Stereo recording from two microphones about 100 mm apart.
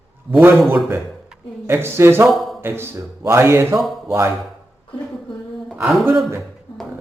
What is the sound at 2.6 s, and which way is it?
Speech, 20° right (ahead or behind).